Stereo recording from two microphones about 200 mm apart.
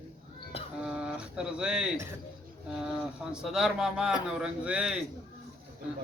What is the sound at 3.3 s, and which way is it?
Speech, centre (ahead or behind).